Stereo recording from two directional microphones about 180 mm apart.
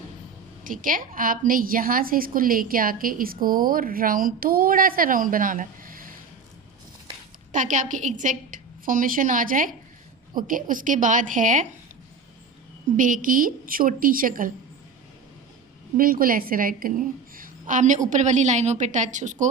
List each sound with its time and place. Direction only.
0.6 s a woman's voice: 50° right (ahead or behind)
7.5 s a woman's voice: 45° right (ahead or behind)
13.0 s a woman's voice: 45° right (ahead or behind)
16.0 s a woman's voice: 55° right (ahead or behind)